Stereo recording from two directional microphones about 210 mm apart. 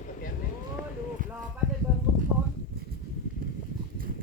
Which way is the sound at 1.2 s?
40° right (ahead or behind).